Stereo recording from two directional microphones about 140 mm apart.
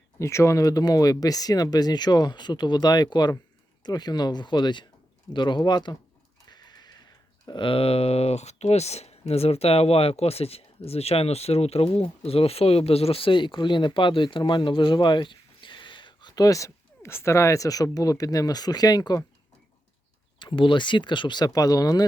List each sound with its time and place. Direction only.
0.2 s speech: 20° left (ahead or behind)
20.4 s speech: 35° left (ahead or behind)